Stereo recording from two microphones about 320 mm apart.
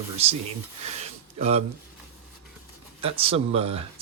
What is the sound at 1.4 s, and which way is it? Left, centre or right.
Speech, centre.